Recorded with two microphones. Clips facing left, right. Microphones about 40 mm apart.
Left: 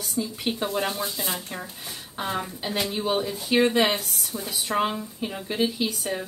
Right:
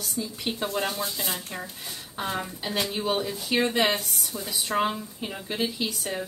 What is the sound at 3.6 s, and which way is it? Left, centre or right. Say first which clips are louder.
A woman's voice: left 2 dB; left.